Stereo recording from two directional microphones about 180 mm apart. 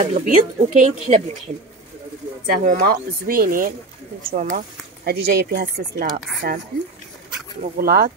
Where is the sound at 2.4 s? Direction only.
50° right (ahead or behind).